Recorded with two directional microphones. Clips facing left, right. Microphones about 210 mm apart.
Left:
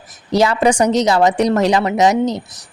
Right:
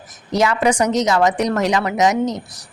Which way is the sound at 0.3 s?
30° left (ahead or behind).